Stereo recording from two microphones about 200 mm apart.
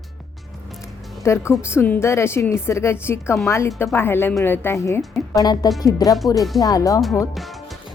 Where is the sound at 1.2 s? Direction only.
15° left (ahead or behind).